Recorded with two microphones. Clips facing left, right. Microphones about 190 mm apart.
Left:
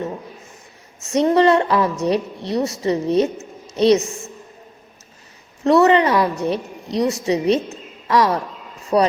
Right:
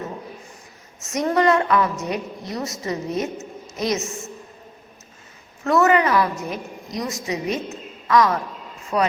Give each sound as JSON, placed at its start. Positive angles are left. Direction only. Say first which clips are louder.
{"t": 1.0, "sound": "a woman's voice", "louder": "left 4 dB", "side_deg": 30}
{"t": 5.6, "sound": "a woman's voice", "louder": "left 4 dB", "side_deg": 30}